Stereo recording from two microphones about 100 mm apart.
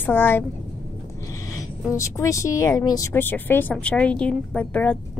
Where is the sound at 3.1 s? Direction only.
20° left (ahead or behind).